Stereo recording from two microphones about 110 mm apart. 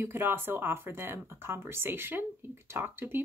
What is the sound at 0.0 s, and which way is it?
Speech, 20° right (ahead or behind).